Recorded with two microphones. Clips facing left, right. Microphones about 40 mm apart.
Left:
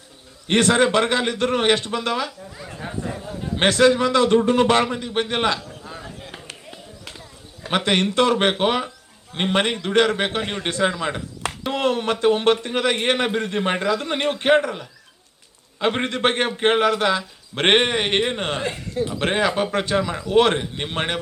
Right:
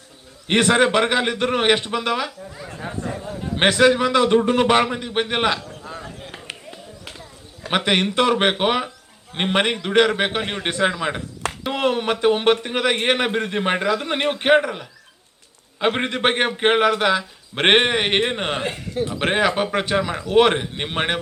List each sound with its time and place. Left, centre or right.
0.4 s a man's voice: centre
3.5 s a man's voice: centre
5.6 s a sound: centre
7.7 s a man's voice: centre